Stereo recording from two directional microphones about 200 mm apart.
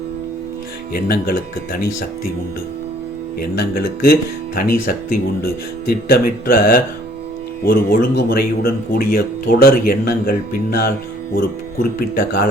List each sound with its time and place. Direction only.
0.9 s speech: 50° left (ahead or behind)
3.5 s speech: 50° left (ahead or behind)